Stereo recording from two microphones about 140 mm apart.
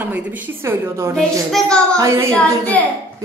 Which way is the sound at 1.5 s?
5° left (ahead or behind).